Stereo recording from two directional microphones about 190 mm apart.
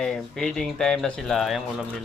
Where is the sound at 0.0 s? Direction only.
5° left (ahead or behind).